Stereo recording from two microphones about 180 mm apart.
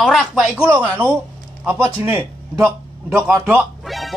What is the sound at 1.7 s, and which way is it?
A man's voice, 10° right (ahead or behind).